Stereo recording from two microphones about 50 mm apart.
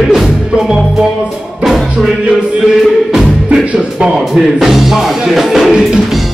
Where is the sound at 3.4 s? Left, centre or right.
Right.